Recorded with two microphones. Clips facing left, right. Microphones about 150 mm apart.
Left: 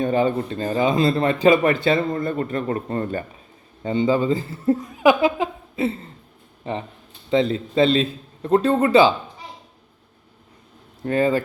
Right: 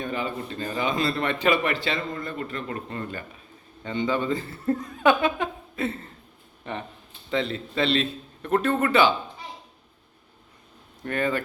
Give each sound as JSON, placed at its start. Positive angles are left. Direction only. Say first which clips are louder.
{"t": 0.0, "sound": "a man's voice", "louder": "left 10 dB", "side_deg": 35}
{"t": 4.6, "sound": "speech", "louder": "left 5 dB", "side_deg": 15}
{"t": 5.2, "sound": "laughter", "louder": "left 5 dB", "side_deg": 25}
{"t": 7.5, "sound": "a man's voice", "louder": "left 7 dB", "side_deg": 35}
{"t": 11.0, "sound": "speech", "louder": "left 7 dB", "side_deg": 30}